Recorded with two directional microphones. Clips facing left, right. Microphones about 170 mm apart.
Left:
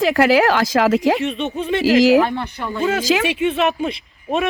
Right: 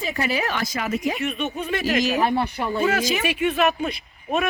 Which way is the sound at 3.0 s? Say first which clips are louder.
Left 6 dB; 90° left.